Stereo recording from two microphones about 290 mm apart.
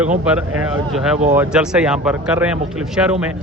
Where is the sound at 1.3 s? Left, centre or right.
Centre.